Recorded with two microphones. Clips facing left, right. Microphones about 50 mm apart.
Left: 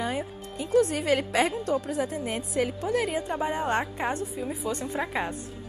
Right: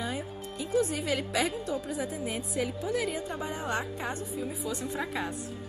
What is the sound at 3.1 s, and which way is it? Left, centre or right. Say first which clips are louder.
A woman's voice: left 5 dB; left.